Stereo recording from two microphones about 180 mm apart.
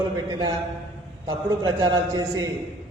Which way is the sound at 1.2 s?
25° right (ahead or behind).